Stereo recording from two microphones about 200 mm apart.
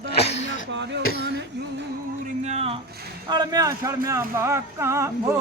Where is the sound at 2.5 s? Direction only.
35° right (ahead or behind).